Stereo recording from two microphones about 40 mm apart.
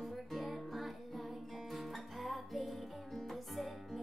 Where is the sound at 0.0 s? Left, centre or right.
Centre.